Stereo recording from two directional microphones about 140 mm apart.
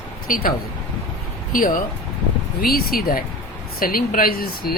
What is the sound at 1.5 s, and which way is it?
Speech, 75° left (ahead or behind).